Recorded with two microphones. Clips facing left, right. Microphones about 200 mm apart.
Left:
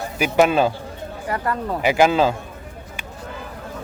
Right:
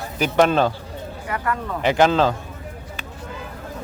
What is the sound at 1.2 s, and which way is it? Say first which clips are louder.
Speech: left 2 dB; 35° left (ahead or behind).